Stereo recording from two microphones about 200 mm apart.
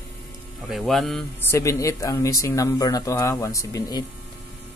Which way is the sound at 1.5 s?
15° left (ahead or behind).